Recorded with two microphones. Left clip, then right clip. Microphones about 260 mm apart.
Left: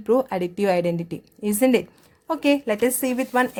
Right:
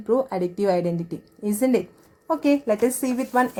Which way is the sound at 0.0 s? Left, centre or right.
Left.